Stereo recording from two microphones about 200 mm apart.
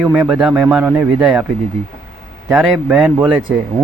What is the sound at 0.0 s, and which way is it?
Speech, 5° right (ahead or behind).